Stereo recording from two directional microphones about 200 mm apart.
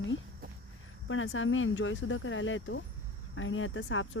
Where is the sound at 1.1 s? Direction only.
80° left.